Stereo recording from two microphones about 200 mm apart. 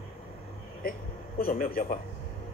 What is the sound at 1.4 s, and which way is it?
Speech, 45° left (ahead or behind).